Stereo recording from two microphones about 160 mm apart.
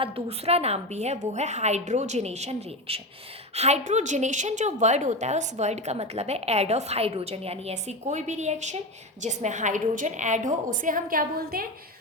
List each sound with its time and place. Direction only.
0.0 s a woman's voice: 40° right (ahead or behind); by 11.7 s 70° right (ahead or behind)